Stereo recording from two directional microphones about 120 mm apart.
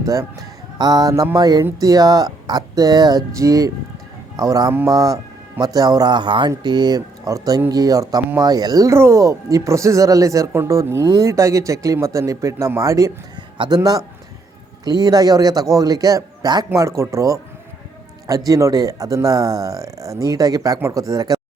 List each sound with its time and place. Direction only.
0.0 s speech: 25° right (ahead or behind)